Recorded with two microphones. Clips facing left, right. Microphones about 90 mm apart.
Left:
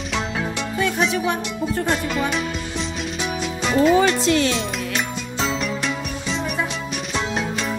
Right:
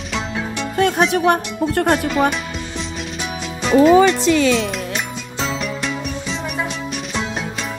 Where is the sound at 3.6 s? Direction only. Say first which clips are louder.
Right 5 dB; centre (ahead or behind).